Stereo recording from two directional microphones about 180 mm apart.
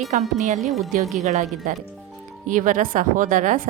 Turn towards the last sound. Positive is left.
turn(degrees=-45)  # may be behind; listen again after turning